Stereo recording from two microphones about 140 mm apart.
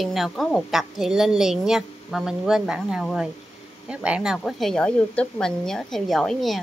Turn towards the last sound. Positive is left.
turn(degrees=0)  # may be behind; listen again after turning